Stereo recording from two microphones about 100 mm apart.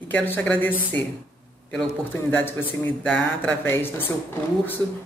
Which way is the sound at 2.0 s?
20° left (ahead or behind).